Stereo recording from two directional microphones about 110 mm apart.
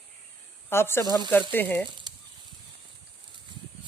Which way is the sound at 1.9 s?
45° right (ahead or behind).